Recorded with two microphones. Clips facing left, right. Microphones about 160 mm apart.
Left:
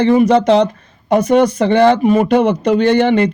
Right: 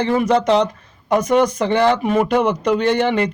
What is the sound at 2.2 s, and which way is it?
Speech, 25° left (ahead or behind).